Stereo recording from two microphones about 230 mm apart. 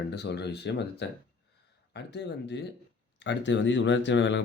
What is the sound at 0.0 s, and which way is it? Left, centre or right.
Speech, left.